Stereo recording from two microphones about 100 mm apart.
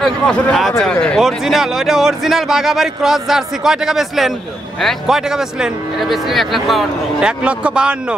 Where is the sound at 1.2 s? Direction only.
5° right (ahead or behind).